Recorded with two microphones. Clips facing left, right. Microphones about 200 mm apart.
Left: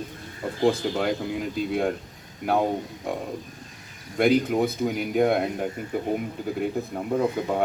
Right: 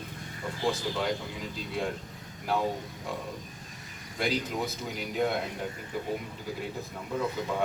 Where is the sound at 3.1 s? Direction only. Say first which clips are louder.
Left 7 dB; 60° left (ahead or behind).